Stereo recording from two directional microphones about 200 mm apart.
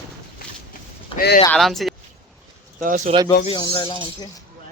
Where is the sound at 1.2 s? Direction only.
50° left (ahead or behind).